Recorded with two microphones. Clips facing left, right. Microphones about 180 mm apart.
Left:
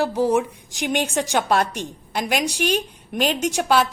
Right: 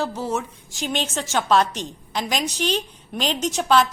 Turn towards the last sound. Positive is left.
turn(degrees=10)  # may be behind; listen again after turning